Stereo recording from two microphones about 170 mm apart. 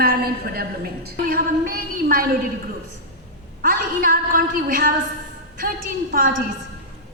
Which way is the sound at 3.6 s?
55° right (ahead or behind).